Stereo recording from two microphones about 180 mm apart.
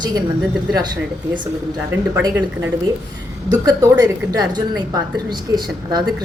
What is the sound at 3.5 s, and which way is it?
A woman's voice, 20° right (ahead or behind).